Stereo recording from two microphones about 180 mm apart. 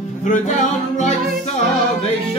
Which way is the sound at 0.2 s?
45° left (ahead or behind).